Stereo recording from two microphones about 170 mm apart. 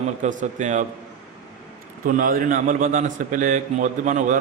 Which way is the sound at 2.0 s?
55° right (ahead or behind).